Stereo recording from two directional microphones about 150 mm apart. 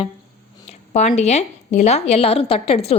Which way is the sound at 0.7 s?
45° left (ahead or behind).